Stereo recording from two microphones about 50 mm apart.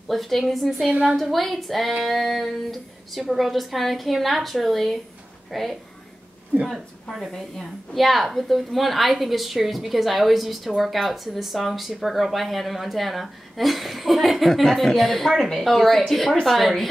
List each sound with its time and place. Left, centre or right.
0.1 s a woman's voice: centre
0.8 s a woman's voice: right
1.1 s a woman's voice: centre